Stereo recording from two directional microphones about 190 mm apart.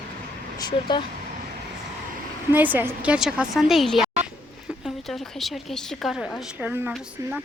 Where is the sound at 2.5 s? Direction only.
10° right (ahead or behind).